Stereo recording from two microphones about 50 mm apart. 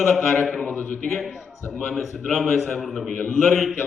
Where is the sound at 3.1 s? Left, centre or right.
Centre.